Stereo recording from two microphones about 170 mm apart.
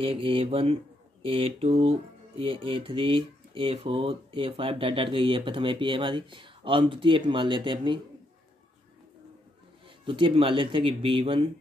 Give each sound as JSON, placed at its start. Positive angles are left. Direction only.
{"t": 0.0, "sound": "speech", "side_deg": -35}
{"t": 10.0, "sound": "speech", "side_deg": -30}